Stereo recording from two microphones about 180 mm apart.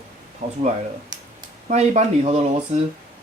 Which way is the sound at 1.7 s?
40° right (ahead or behind).